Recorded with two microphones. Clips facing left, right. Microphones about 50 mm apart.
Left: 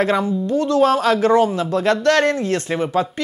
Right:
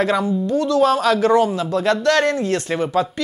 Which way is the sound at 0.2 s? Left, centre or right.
Left.